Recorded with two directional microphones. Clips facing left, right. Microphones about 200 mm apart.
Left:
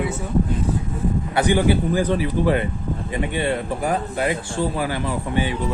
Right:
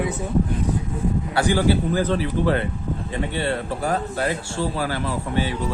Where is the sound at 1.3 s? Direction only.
20° left (ahead or behind).